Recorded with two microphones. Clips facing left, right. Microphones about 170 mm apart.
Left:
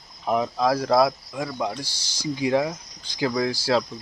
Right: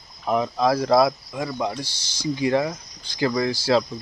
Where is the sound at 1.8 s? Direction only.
10° left (ahead or behind).